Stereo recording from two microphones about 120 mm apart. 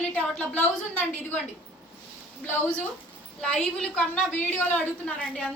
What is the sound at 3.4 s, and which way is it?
A woman's voice, 5° left (ahead or behind).